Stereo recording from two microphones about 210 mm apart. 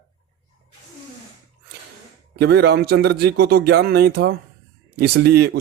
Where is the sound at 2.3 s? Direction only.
50° right (ahead or behind).